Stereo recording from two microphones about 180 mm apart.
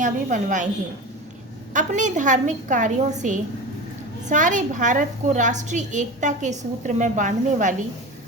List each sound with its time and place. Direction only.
0.0 s a woman's voice: 45° right (ahead or behind)
1.7 s a woman's voice: 45° right (ahead or behind)